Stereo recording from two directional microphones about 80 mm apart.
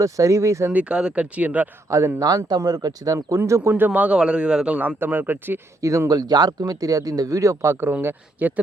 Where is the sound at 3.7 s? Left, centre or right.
Centre.